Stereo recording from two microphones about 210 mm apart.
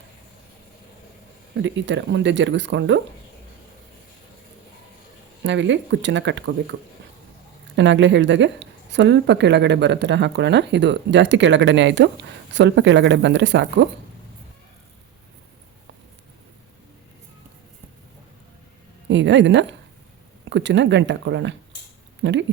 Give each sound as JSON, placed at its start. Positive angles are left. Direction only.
{"t": 1.5, "sound": "speech", "side_deg": -60}
{"t": 5.4, "sound": "speech", "side_deg": -60}
{"t": 7.8, "sound": "speech", "side_deg": -60}
{"t": 19.0, "sound": "speech", "side_deg": -60}